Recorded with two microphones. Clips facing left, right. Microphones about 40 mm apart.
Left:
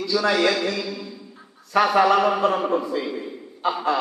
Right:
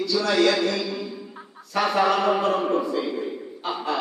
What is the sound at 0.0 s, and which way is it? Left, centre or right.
Speech, centre.